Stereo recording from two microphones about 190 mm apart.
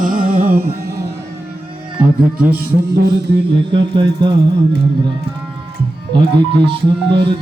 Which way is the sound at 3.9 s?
25° right (ahead or behind).